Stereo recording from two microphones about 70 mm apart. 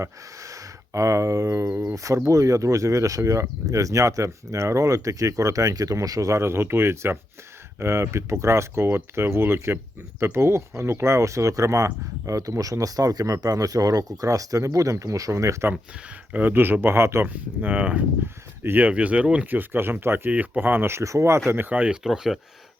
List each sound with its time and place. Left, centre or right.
0.0 s speech: right
16.3 s speech: right
17.2 s speech: right
18.9 s speech: centre
22.0 s speech: centre